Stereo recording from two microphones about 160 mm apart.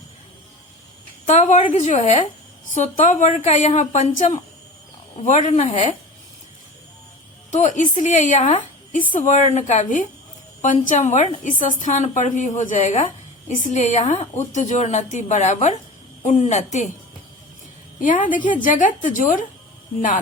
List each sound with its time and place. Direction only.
1.3 s a woman's voice: 50° left (ahead or behind)
7.5 s a woman's voice: 50° left (ahead or behind)
18.0 s a woman's voice: 55° left (ahead or behind)